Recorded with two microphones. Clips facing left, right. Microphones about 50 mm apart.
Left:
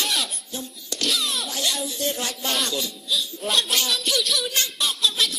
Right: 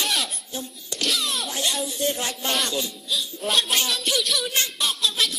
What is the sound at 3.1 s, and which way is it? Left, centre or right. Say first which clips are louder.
Speech: left 2 dB; centre.